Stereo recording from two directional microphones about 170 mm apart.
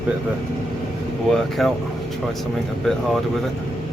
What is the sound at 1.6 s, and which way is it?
Speech, centre (ahead or behind).